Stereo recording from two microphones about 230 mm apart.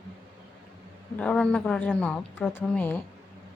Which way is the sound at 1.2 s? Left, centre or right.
Centre.